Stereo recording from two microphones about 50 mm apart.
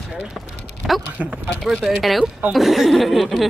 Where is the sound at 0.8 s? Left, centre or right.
Centre.